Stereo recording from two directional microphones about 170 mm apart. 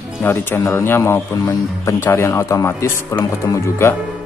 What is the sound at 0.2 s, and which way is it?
Speech, 15° left (ahead or behind).